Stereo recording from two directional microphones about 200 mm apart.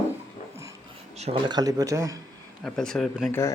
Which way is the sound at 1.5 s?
20° right (ahead or behind).